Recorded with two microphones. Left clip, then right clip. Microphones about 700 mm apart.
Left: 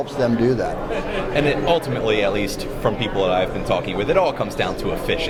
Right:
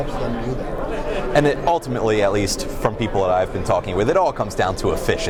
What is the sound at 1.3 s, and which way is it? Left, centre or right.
Speech, right.